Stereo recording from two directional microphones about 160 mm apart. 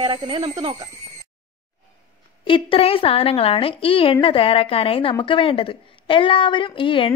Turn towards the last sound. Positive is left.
turn(degrees=35)  # may be behind; listen again after turning